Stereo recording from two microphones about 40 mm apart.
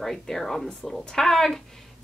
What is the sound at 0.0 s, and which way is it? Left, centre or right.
A woman's voice, centre.